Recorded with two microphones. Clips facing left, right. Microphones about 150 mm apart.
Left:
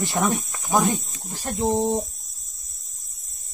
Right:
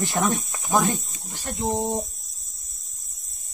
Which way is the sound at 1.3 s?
30° left (ahead or behind).